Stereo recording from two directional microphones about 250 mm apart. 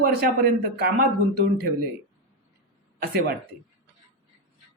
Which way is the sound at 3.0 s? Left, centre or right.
Right.